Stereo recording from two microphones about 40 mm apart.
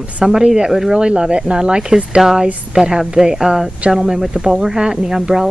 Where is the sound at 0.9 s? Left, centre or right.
Right.